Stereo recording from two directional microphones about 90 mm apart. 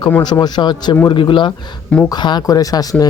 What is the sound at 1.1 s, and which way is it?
A man's voice, 65° left (ahead or behind).